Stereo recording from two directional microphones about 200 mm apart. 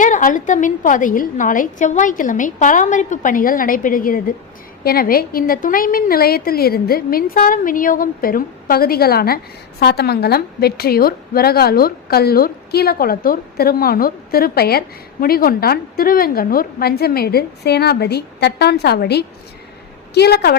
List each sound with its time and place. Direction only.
0.0 s a woman's voice: 40° left (ahead or behind)